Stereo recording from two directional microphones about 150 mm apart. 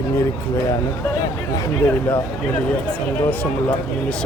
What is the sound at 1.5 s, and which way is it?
Speech, 20° left (ahead or behind).